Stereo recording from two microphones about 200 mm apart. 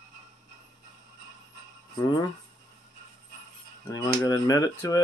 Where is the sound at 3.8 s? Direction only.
15° left (ahead or behind).